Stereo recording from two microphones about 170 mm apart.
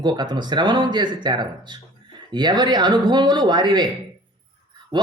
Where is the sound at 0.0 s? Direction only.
25° right (ahead or behind).